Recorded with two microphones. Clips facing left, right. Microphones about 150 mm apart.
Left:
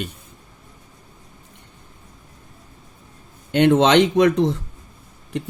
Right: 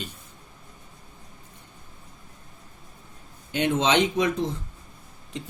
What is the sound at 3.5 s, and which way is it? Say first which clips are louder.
Speech: left 8 dB; 65° left (ahead or behind).